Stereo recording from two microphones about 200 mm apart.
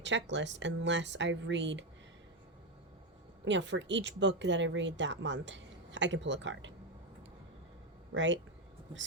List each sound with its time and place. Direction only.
0.0 s speech: 65° right (ahead or behind)
3.4 s speech: 65° right (ahead or behind)
8.1 s speech: 65° right (ahead or behind)